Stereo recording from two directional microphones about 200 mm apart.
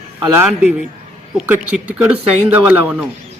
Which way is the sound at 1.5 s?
5° right (ahead or behind).